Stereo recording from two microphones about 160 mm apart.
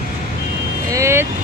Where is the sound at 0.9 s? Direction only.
15° right (ahead or behind).